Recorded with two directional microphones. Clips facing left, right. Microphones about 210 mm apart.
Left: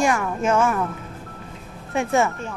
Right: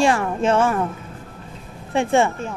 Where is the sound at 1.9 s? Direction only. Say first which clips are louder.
Right 3 dB; 30° right (ahead or behind).